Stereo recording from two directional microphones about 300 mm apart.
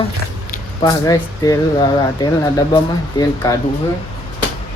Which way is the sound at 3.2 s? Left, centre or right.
Centre.